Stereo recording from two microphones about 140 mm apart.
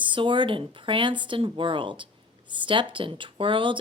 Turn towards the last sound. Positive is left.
turn(degrees=-35)  # may be behind; listen again after turning